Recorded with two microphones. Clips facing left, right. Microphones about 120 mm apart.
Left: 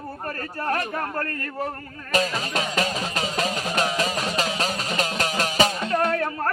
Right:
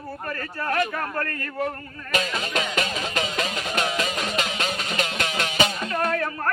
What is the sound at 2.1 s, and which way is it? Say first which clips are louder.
Music: left 2 dB; 35° left (ahead or behind).